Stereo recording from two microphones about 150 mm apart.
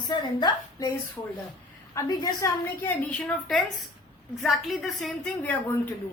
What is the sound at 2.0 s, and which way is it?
Speech, 20° left (ahead or behind).